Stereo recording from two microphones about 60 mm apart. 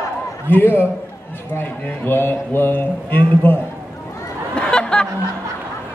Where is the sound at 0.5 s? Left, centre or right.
Left.